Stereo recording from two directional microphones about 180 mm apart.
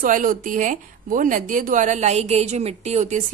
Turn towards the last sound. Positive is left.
turn(degrees=-40)  # may be behind; listen again after turning